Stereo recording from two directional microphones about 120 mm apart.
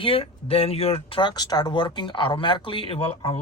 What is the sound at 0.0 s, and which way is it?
Speech, 50° left (ahead or behind).